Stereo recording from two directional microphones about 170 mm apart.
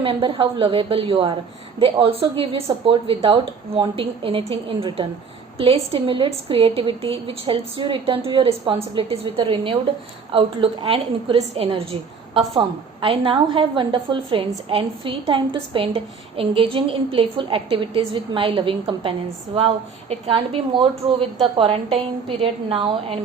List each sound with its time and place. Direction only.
0.0 s a woman's voice: 30° right (ahead or behind)